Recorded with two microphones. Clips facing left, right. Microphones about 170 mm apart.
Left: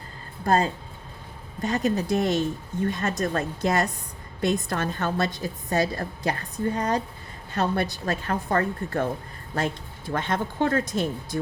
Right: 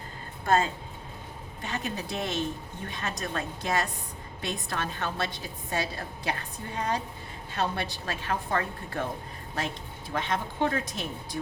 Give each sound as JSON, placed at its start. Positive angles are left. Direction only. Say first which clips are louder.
{"t": 0.4, "sound": "a woman's voice", "louder": "left 3 dB", "side_deg": 35}
{"t": 10.1, "sound": "a woman's voice", "louder": "left 4 dB", "side_deg": 50}